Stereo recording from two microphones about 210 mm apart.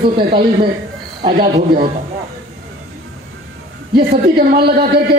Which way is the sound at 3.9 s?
45° right (ahead or behind).